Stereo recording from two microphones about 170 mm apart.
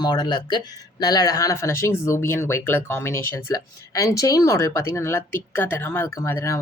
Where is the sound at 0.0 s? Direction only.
25° left (ahead or behind).